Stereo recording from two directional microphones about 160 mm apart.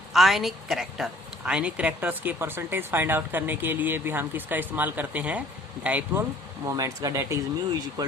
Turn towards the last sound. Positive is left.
turn(degrees=-20)  # may be behind; listen again after turning